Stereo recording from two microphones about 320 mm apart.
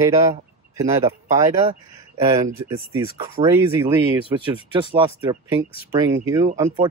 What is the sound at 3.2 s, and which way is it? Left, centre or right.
Speech, centre.